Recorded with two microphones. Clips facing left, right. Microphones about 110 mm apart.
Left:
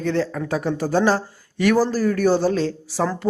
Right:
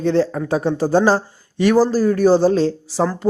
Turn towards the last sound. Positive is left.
turn(degrees=-25)  # may be behind; listen again after turning